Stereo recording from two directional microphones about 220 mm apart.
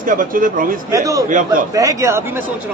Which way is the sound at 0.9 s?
15° right (ahead or behind).